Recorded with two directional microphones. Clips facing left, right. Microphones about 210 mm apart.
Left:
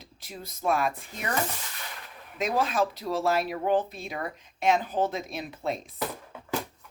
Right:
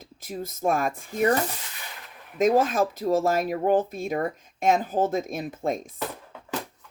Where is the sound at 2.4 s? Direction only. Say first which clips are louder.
Right 6 dB; 45° right (ahead or behind).